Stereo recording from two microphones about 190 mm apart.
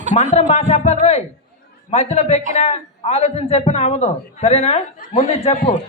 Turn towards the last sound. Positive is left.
turn(degrees=35)  # may be behind; listen again after turning